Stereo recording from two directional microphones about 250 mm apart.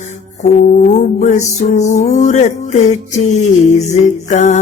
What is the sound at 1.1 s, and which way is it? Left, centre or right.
Mantra, left.